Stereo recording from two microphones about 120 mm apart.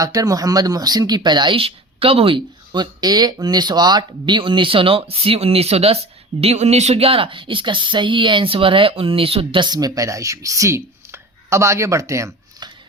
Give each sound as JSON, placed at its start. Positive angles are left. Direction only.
{"t": 0.0, "sound": "a woman's voice", "side_deg": -30}